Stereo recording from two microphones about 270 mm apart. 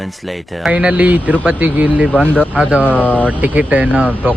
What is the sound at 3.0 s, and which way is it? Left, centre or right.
Speech, centre.